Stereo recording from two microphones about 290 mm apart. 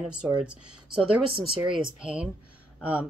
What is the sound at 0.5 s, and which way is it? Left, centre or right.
Speech, right.